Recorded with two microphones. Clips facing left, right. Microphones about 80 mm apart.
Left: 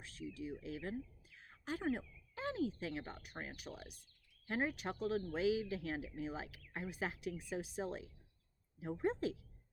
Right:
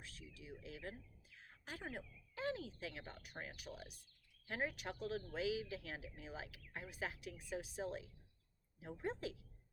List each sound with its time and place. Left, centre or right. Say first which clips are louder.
0.0 s speech: left 11 dB; left